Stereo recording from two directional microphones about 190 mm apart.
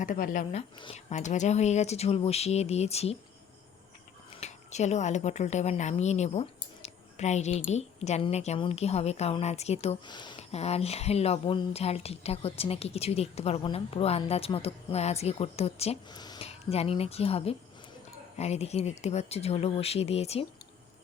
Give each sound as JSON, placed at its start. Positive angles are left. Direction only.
{"t": 0.0, "sound": "speech", "side_deg": 45}
{"t": 0.8, "sound": "speech", "side_deg": 30}
{"t": 4.4, "sound": "speech", "side_deg": 35}
{"t": 16.1, "sound": "speech", "side_deg": 20}
{"t": 16.5, "sound": "speech", "side_deg": 35}